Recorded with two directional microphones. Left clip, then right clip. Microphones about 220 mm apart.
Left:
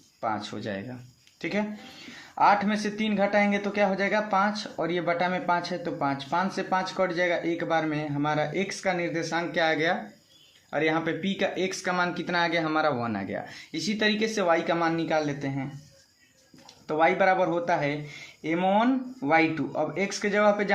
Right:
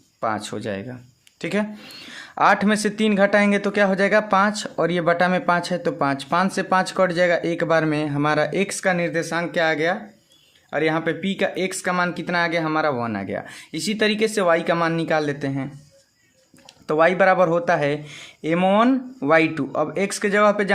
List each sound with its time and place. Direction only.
0.2 s speech: 45° right (ahead or behind)
16.8 s speech: 45° right (ahead or behind)